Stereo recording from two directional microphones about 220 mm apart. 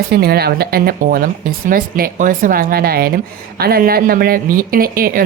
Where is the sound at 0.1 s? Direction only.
45° right (ahead or behind).